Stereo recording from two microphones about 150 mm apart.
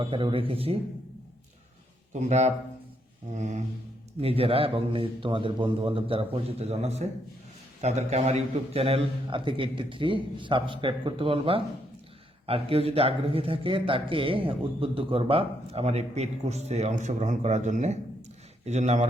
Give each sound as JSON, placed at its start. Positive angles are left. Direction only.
{"t": 0.0, "sound": "speech", "side_deg": -35}
{"t": 2.2, "sound": "a man's voice", "side_deg": -50}
{"t": 3.3, "sound": "a sound", "side_deg": -55}
{"t": 4.2, "sound": "a man's voice", "side_deg": -40}